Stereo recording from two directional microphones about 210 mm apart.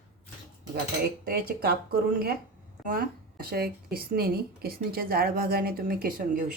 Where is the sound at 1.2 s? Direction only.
45° right (ahead or behind).